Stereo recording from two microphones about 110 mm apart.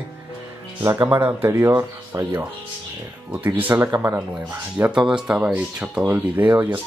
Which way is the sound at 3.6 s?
15° right (ahead or behind).